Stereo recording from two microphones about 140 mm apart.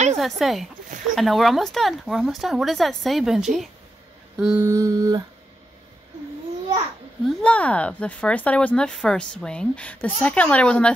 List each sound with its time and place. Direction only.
0.2 s speech: centre (ahead or behind)
4.6 s a sound: 20° right (ahead or behind)
7.2 s speech: 10° left (ahead or behind)